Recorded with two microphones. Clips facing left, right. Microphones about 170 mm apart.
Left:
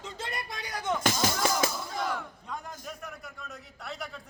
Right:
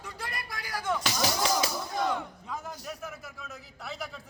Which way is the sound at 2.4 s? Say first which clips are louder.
Right 2 dB; centre (ahead or behind).